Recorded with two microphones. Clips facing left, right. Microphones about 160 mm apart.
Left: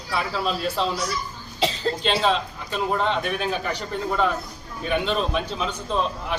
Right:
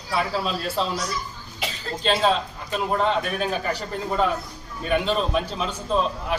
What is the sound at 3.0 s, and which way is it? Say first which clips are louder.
A man's voice: right 1 dB; centre (ahead or behind).